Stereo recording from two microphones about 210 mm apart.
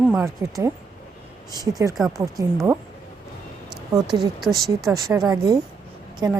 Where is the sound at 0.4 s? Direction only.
15° right (ahead or behind).